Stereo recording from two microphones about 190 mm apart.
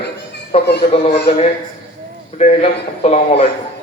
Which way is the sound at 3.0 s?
35° left (ahead or behind).